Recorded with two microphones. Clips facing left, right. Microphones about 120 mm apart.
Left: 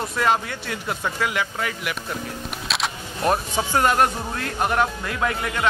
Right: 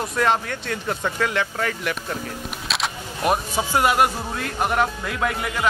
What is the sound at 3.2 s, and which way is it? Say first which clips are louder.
Speech: even; 10° right (ahead or behind).